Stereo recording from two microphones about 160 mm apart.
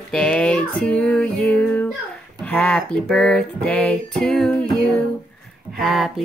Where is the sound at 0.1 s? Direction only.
5° left (ahead or behind).